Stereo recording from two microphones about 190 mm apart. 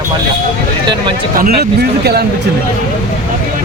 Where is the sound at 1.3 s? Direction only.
55° right (ahead or behind).